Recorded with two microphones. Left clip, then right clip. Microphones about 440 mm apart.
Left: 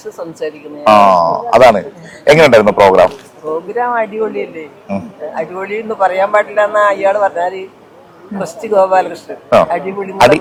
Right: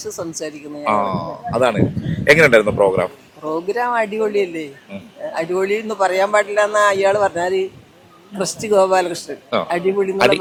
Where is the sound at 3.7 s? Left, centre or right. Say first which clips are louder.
Left 4 dB; right.